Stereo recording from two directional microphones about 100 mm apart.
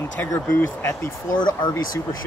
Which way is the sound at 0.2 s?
20° left (ahead or behind).